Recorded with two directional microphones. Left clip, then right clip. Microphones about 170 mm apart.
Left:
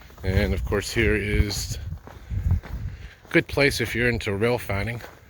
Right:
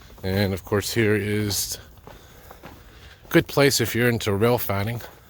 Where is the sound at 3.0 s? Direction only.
30° right (ahead or behind).